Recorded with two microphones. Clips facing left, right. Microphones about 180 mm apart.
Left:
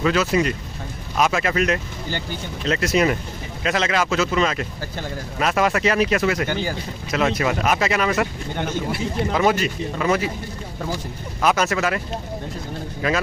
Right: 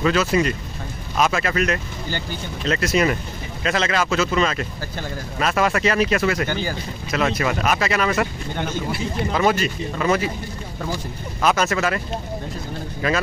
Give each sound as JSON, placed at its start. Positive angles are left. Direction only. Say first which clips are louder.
{"t": 0.0, "sound": "speech", "louder": "even", "side_deg": 10}
{"t": 11.4, "sound": "speech", "louder": "even", "side_deg": 10}